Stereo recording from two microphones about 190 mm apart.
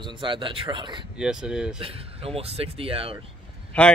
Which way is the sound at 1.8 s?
30° right (ahead or behind).